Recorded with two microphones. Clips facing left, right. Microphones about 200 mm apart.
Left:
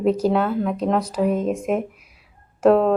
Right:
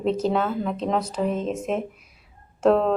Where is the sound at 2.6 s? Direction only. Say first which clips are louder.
Left 3 dB; 5° left (ahead or behind).